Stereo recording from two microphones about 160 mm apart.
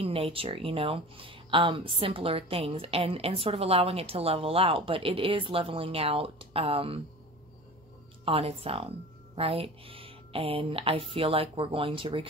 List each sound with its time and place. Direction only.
0.0 s speech: 35° right (ahead or behind)
8.3 s speech: 35° right (ahead or behind)